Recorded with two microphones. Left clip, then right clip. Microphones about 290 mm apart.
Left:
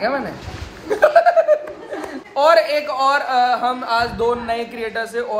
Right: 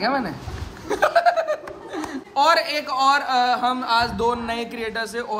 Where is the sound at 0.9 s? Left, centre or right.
Centre.